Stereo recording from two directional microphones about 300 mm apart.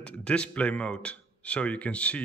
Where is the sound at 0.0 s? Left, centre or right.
Centre.